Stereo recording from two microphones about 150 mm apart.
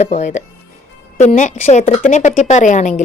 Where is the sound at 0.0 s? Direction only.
50° left (ahead or behind).